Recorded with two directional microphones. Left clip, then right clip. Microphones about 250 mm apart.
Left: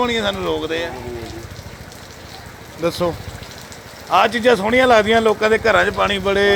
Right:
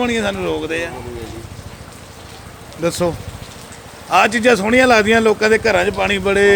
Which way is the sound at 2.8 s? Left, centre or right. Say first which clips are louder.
Right 1 dB; right.